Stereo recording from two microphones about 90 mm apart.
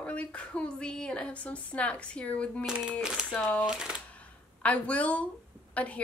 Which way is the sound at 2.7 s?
5° right (ahead or behind).